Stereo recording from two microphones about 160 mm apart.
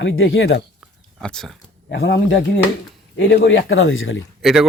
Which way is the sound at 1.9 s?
90° left.